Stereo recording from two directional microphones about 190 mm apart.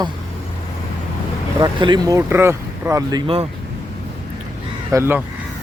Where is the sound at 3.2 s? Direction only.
30° right (ahead or behind).